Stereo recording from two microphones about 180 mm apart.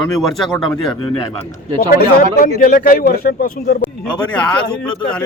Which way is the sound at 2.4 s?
50° left (ahead or behind).